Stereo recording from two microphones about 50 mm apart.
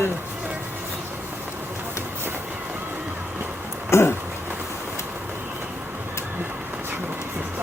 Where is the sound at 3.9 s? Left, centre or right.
Left.